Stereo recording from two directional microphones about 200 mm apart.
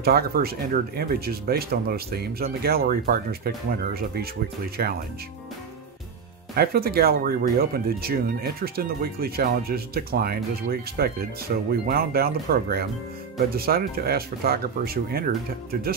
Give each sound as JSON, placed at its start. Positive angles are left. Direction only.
{"t": 0.0, "sound": "speech", "side_deg": -50}
{"t": 6.5, "sound": "speech", "side_deg": -50}